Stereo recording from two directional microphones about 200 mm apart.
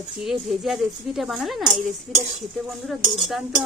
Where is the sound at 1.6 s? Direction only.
20° right (ahead or behind).